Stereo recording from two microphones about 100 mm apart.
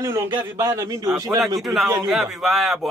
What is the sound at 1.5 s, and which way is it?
A man's voice, centre (ahead or behind).